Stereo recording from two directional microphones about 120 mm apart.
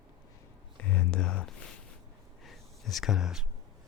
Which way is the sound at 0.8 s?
10° left (ahead or behind).